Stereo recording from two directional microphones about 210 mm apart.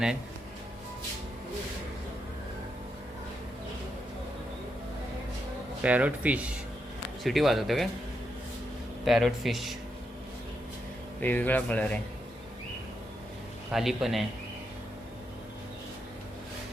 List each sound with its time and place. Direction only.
5.8 s speech: 5° right (ahead or behind)
9.0 s speech: centre (ahead or behind)
11.2 s speech: 10° left (ahead or behind)
13.7 s speech: centre (ahead or behind)